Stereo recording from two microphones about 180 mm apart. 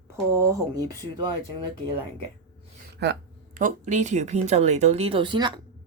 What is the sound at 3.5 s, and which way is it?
Speech, 45° right (ahead or behind).